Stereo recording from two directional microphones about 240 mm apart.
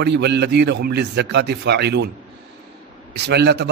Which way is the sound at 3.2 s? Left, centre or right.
Right.